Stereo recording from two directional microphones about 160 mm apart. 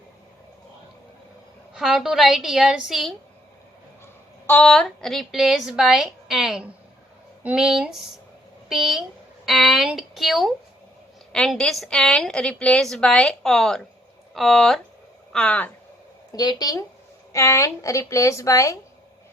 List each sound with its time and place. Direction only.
1.7 s a woman's voice: 5° right (ahead or behind)
4.0 s a woman's voice: 10° left (ahead or behind)
16.3 s speech: 25° left (ahead or behind)